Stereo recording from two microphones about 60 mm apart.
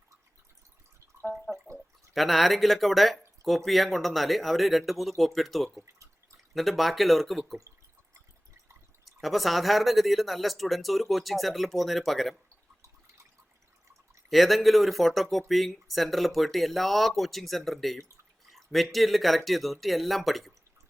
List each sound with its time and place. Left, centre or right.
1.7 s drip: right
2.1 s speech: centre
9.0 s speech: centre
14.3 s speech: centre